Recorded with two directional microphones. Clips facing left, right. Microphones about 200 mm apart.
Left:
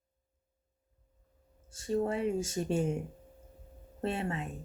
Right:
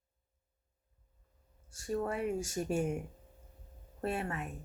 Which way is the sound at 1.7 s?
25° left (ahead or behind).